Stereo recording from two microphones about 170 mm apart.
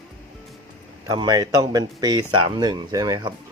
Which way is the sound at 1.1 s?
25° right (ahead or behind).